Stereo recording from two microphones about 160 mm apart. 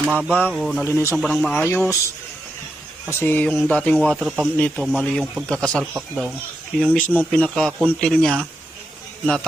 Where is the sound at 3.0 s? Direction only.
10° left (ahead or behind).